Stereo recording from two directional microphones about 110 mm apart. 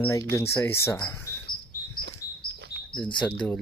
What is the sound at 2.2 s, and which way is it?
Chirp, 30° left (ahead or behind).